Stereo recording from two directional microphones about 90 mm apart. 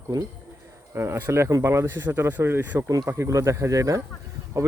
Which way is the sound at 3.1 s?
35° right (ahead or behind).